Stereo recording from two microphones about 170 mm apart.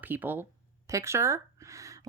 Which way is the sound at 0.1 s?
10° right (ahead or behind).